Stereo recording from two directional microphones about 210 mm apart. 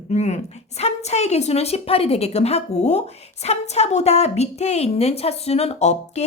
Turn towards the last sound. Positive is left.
turn(degrees=30)  # may be behind; listen again after turning